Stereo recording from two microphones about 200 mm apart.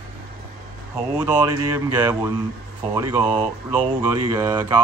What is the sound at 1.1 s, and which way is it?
Speech, 15° right (ahead or behind).